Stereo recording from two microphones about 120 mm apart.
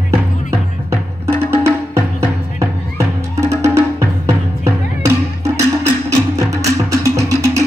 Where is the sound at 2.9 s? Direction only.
20° right (ahead or behind).